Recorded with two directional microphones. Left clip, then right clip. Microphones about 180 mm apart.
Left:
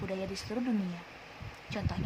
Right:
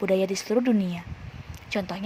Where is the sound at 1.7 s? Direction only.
45° right (ahead or behind).